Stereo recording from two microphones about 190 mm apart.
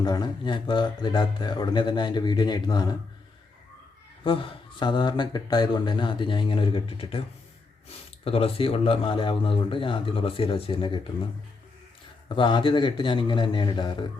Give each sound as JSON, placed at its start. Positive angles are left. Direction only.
{"t": 0.0, "sound": "speech", "side_deg": 20}
{"t": 4.2, "sound": "speech", "side_deg": 25}
{"t": 12.3, "sound": "speech", "side_deg": 25}